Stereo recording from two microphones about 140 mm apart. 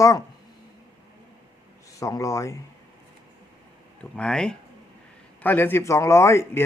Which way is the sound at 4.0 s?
5° left (ahead or behind).